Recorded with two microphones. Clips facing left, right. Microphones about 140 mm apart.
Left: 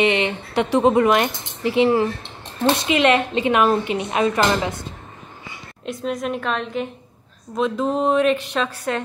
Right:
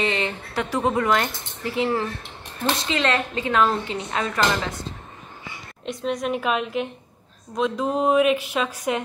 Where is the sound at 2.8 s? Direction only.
15° left (ahead or behind).